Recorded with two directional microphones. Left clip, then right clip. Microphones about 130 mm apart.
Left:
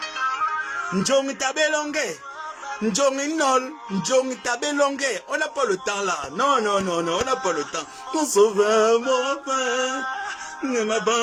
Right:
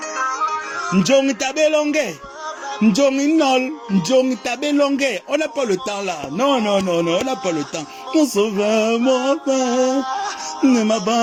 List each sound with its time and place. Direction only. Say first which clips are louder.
0.2 s music: right 3 dB; 25° right (ahead or behind)
0.9 s speech: right 6 dB; 20° right (ahead or behind); by 10.2 s 35° right (ahead or behind)
10.6 s music: right 5 dB; 35° right (ahead or behind)